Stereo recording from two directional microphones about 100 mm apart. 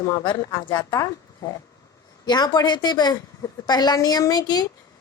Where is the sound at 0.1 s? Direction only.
45° left (ahead or behind).